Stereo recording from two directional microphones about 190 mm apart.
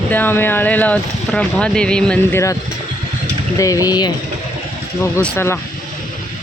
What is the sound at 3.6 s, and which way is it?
Speech, 15° left (ahead or behind).